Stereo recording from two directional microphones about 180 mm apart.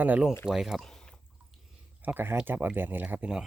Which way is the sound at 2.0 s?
10° right (ahead or behind).